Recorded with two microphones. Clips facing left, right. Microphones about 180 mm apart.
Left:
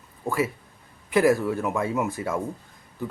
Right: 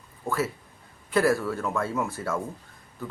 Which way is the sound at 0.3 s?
15° left (ahead or behind).